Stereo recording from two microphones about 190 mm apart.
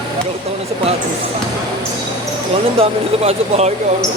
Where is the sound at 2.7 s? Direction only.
30° right (ahead or behind).